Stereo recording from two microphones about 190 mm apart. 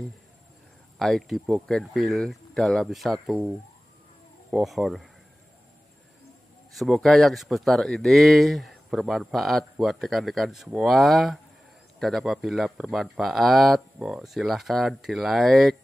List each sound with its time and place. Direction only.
0.9 s speech: centre (ahead or behind)
6.7 s speech: centre (ahead or behind)